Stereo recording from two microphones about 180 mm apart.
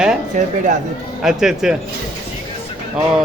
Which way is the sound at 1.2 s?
5° right (ahead or behind).